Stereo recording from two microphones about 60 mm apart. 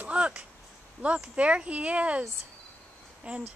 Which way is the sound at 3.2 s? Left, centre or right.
Right.